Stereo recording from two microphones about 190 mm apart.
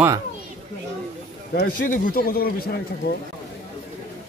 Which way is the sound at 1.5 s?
45° left (ahead or behind).